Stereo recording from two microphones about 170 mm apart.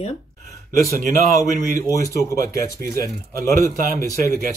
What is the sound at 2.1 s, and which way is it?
Speech, 20° left (ahead or behind).